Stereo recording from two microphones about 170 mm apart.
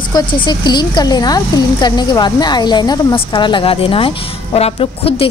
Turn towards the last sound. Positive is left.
turn(degrees=35)  # may be behind; listen again after turning